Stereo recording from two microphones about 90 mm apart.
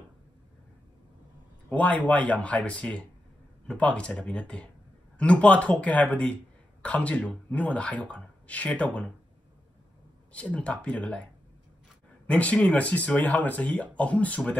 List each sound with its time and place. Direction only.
1.7 s speech: 15° left (ahead or behind)
10.3 s speech: 15° left (ahead or behind)
12.3 s speech: 15° left (ahead or behind)